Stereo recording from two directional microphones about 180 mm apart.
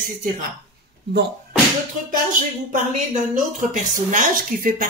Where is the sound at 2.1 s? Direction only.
50° right (ahead or behind).